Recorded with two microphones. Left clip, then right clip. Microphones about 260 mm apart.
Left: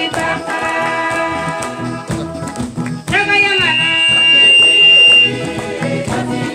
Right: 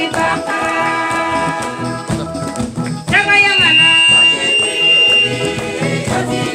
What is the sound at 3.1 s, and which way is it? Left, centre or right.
Music, centre.